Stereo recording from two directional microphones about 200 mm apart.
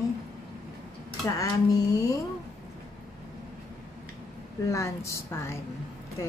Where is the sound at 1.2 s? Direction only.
15° left (ahead or behind).